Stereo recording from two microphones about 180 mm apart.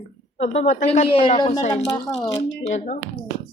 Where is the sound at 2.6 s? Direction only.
40° left (ahead or behind).